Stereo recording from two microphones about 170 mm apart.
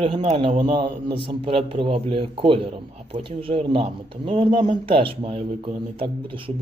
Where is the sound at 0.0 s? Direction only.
30° right (ahead or behind).